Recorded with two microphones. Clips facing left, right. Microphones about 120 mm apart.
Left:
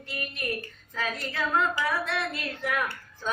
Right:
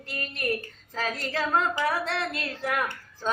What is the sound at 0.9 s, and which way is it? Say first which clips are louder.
Speech: right 2 dB; 35° right (ahead or behind).